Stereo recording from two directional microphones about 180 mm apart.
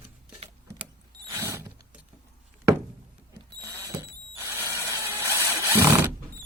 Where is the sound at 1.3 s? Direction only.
15° right (ahead or behind).